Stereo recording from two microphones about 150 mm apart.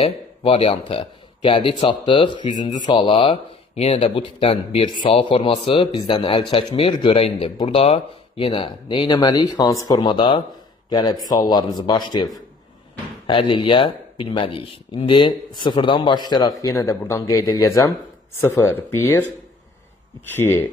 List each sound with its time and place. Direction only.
0.0 s speech: 40° left (ahead or behind)
13.3 s speech: 35° left (ahead or behind); by 19.2 s 20° left (ahead or behind)
20.3 s speech: 15° left (ahead or behind)